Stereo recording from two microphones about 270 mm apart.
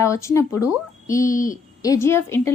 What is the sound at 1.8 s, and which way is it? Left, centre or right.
Speech, centre.